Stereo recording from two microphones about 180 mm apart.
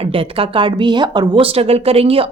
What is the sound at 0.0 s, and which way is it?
Speech, 30° right (ahead or behind).